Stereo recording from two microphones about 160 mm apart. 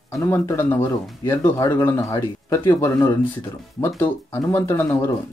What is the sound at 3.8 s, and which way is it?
Speech, 15° left (ahead or behind).